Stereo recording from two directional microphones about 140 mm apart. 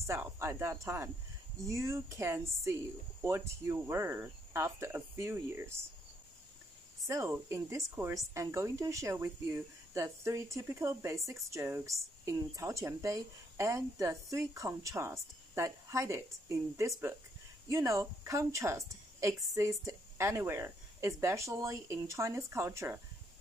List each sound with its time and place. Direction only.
0.0 s speech: 20° right (ahead or behind)
7.1 s speech: 20° right (ahead or behind)